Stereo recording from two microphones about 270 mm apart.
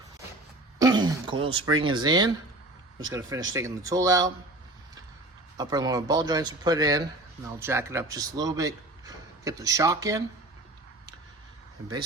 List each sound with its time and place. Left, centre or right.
0.8 s speech: centre
5.5 s speech: centre